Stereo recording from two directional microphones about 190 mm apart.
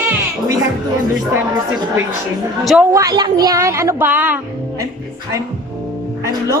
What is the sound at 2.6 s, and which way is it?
Speech, centre (ahead or behind).